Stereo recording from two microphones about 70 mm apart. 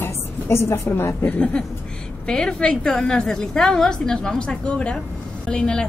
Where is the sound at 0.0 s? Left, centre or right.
Left.